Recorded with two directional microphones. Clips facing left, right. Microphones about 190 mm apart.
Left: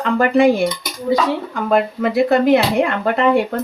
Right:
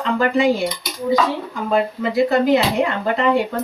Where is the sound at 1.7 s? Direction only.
60° left (ahead or behind).